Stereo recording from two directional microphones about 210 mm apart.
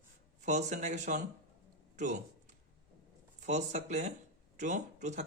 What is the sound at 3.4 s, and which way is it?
A man's voice, 35° right (ahead or behind).